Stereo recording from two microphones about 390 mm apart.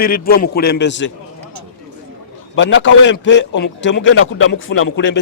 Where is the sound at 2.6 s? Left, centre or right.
Left.